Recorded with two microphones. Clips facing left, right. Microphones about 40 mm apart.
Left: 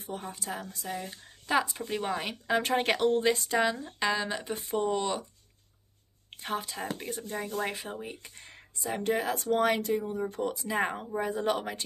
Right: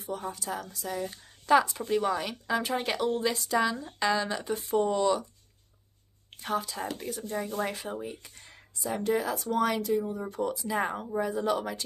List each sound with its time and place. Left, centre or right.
0.4 s speech: left
0.9 s speech: centre
1.9 s speech: left
2.6 s speech: left
3.2 s speech: left
4.0 s speech: centre
6.3 s speech: left